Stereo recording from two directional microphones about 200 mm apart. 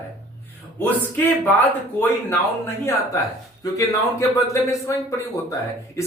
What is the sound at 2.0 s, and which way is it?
Speech, 15° left (ahead or behind).